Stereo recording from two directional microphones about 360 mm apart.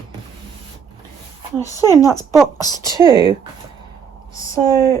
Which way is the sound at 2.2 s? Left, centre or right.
Centre.